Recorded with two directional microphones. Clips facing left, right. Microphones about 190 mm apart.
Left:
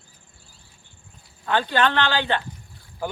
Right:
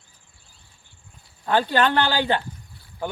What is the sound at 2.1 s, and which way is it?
Speech, 10° right (ahead or behind).